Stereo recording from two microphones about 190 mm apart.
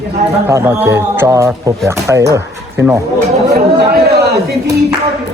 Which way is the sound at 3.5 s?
55° right (ahead or behind).